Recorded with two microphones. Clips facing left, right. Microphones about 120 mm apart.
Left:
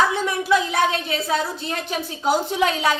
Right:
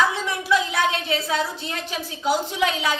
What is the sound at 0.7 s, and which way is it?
A woman's voice, 45° left (ahead or behind).